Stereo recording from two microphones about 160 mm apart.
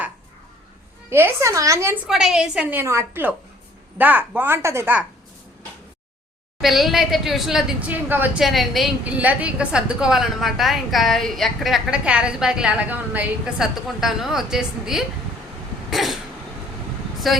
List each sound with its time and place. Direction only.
1.1 s a woman's voice: 15° right (ahead or behind)
2.0 s a woman's voice: 5° right (ahead or behind)
6.6 s a woman's voice: centre (ahead or behind)
15.9 s cough: centre (ahead or behind)
17.2 s a woman's voice: centre (ahead or behind)